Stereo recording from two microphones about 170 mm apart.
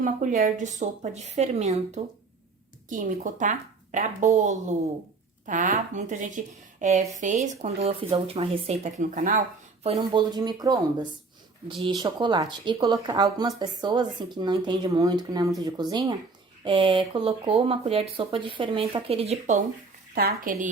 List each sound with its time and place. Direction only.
0.0 s speech: 50° right (ahead or behind)
9.8 s speech: 30° right (ahead or behind)
20.1 s speech: 60° right (ahead or behind)